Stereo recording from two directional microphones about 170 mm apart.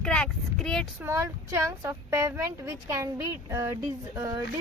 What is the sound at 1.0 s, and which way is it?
A woman's voice, 20° right (ahead or behind).